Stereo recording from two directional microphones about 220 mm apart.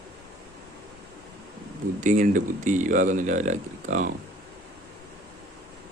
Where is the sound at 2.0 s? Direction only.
35° right (ahead or behind).